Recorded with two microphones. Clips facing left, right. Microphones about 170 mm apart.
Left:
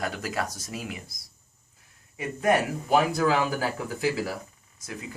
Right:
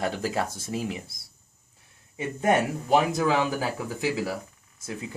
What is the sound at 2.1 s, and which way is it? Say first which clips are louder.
Speech: even; 25° right (ahead or behind).